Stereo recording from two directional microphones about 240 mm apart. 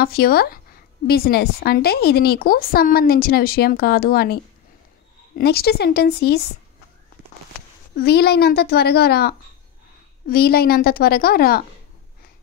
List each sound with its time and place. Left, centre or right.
0.0 s a woman's voice: left
5.4 s a woman's voice: left
7.9 s a woman's voice: left